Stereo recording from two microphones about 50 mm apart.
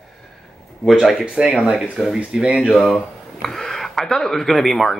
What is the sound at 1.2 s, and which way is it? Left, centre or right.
Speech, centre.